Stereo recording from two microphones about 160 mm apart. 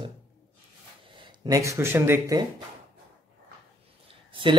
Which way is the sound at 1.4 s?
20° right (ahead or behind).